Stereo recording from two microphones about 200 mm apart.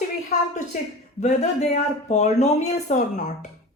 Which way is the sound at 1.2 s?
35° left (ahead or behind).